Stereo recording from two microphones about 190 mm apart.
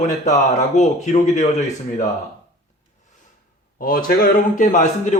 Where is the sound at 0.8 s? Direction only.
35° left (ahead or behind).